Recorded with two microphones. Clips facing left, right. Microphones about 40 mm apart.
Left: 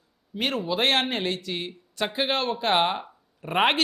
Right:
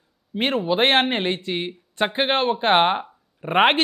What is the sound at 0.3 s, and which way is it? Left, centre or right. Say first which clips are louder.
Speech: right 5 dB; right.